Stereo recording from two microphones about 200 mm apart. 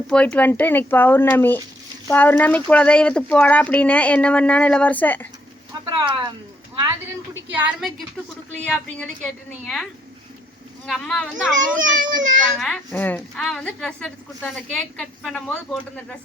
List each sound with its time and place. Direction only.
0.1 s speech: 5° left (ahead or behind)
5.8 s a sound: 15° right (ahead or behind)
7.5 s a woman's voice: 5° right (ahead or behind)
8.5 s a woman's voice: 5° left (ahead or behind)
11.8 s a child's voice: 40° right (ahead or behind)
12.5 s a woman's voice: 5° left (ahead or behind)